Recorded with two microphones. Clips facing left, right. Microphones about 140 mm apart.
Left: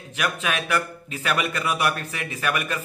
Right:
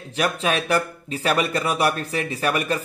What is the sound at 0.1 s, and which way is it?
A man's voice, 35° right (ahead or behind).